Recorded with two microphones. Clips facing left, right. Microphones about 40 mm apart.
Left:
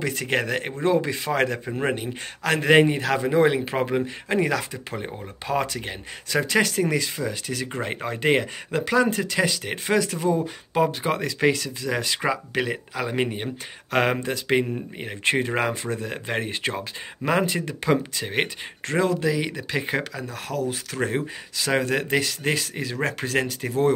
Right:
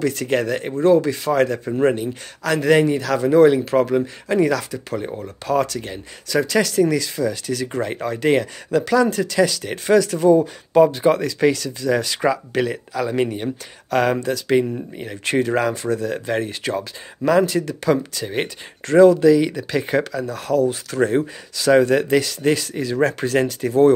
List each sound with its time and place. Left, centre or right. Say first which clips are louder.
0.0 s speech: right 5 dB; left
18.9 s speech: right 11 dB; centre